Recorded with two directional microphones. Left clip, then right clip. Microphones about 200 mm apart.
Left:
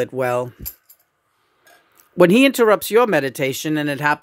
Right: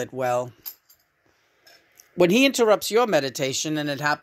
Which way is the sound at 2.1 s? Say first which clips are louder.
Left 5 dB; 40° left (ahead or behind).